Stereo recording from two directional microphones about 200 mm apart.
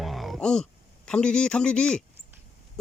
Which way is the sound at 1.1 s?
5° left (ahead or behind).